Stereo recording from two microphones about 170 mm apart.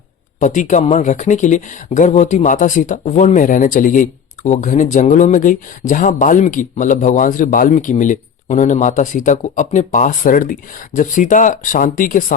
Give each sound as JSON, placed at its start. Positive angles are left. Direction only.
{"t": 0.3, "sound": "speech", "side_deg": 45}